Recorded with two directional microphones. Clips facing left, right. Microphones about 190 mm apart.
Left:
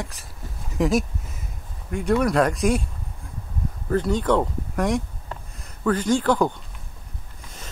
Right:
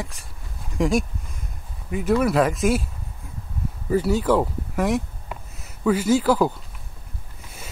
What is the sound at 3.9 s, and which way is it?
A man's voice, 5° right (ahead or behind).